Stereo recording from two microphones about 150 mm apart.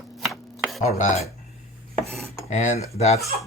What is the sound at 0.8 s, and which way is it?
Speech, 50° left (ahead or behind).